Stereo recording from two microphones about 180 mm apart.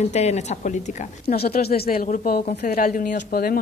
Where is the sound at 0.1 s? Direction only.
40° left (ahead or behind).